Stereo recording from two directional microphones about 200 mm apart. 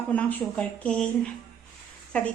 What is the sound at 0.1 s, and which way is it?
Speech, 5° left (ahead or behind).